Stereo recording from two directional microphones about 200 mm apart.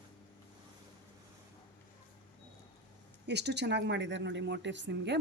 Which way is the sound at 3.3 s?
60° right (ahead or behind).